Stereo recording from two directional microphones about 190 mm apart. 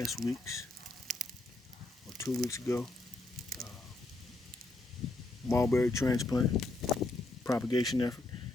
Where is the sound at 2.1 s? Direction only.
Centre (ahead or behind).